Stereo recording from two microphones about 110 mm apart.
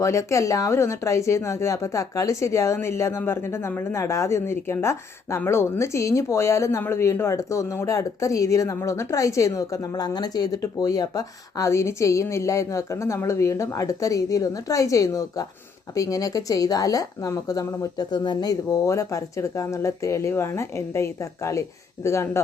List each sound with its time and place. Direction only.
0.0 s a woman's voice: 25° left (ahead or behind); by 18.5 s 40° left (ahead or behind)
18.7 s speech: 30° left (ahead or behind)